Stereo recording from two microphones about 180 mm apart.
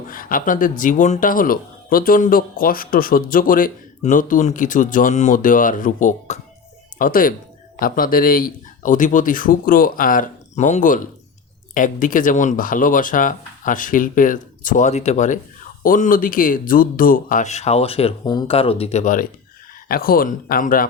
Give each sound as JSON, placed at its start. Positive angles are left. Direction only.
{"t": 0.1, "sound": "speech", "side_deg": 50}